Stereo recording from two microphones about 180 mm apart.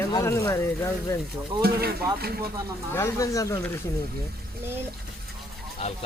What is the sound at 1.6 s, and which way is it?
Speech, 60° right (ahead or behind).